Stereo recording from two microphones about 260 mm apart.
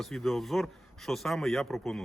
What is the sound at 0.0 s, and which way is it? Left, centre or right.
Speech, centre.